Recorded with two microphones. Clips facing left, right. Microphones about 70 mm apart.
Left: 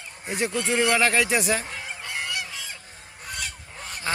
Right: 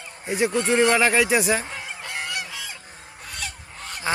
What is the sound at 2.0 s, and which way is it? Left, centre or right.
Goose, right.